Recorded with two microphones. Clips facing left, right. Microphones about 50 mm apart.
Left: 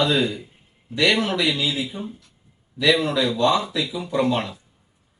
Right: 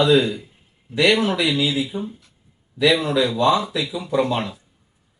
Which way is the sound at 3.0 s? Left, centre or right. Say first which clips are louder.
Right 2 dB; centre.